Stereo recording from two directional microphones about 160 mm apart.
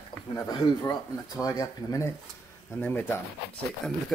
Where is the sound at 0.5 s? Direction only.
25° left (ahead or behind).